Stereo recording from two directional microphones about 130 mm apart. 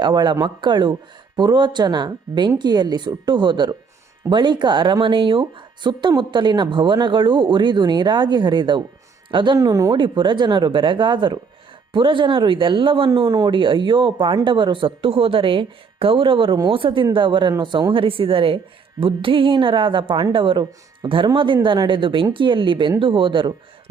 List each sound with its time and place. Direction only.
0.0 s speech: 35° right (ahead or behind)
9.6 s speech: 25° right (ahead or behind)
10.0 s speech: 40° right (ahead or behind)
13.1 s speech: 30° right (ahead or behind)